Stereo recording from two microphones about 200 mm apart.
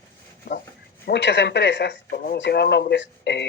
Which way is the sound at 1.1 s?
60° left (ahead or behind).